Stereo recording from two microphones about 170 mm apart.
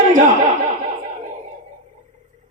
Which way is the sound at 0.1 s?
45° right (ahead or behind).